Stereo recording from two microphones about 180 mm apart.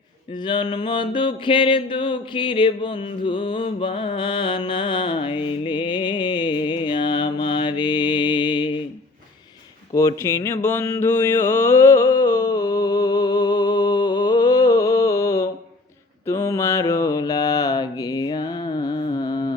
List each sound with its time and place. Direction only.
0.3 s music: 25° left (ahead or behind)
9.9 s mantra: 20° left (ahead or behind)